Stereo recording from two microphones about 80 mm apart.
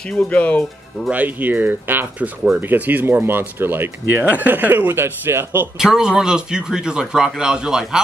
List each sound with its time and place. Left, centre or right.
0.1 s speech: centre
1.1 s speech: right
5.8 s speech: centre